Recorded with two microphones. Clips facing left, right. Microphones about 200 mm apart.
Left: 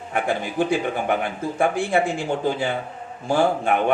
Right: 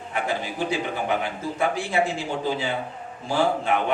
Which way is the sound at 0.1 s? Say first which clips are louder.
Left 3 dB; 55° left (ahead or behind).